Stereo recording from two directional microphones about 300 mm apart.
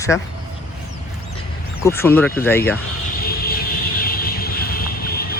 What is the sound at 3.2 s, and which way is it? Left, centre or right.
Vehicle, left.